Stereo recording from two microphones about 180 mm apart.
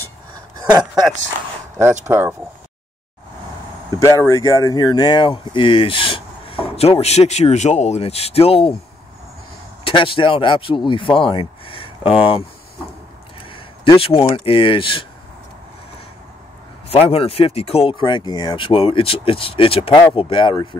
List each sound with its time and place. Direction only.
0.6 s speech: 20° right (ahead or behind)
2.0 s speech: 15° right (ahead or behind)
3.9 s speech: 15° left (ahead or behind); by 8.7 s 30° left (ahead or behind)
9.8 s speech: 30° left (ahead or behind)
13.5 s a sound: 30° left (ahead or behind)
14.3 s speech: 30° left (ahead or behind)
16.9 s speech: 35° left (ahead or behind)